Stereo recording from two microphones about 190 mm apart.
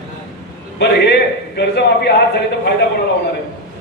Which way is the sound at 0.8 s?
60° left (ahead or behind).